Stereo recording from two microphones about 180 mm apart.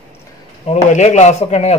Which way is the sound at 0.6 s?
40° left (ahead or behind).